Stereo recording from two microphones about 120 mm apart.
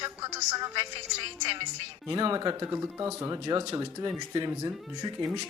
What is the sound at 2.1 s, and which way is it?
Speech, 30° right (ahead or behind).